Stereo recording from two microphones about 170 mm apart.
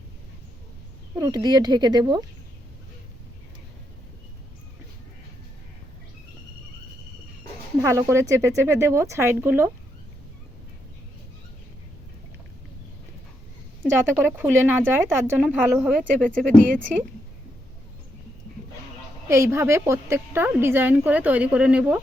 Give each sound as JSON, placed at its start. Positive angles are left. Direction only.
{"t": 1.1, "sound": "speech", "side_deg": -20}
{"t": 7.8, "sound": "a woman's voice", "side_deg": -15}
{"t": 13.8, "sound": "a woman's voice", "side_deg": -15}
{"t": 15.4, "sound": "speech", "side_deg": 0}
{"t": 19.3, "sound": "a woman's voice", "side_deg": -15}